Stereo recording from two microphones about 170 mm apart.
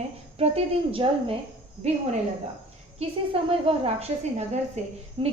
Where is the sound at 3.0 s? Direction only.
35° right (ahead or behind).